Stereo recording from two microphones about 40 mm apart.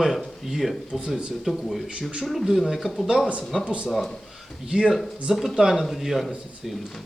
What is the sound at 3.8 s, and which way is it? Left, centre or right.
Speech, centre.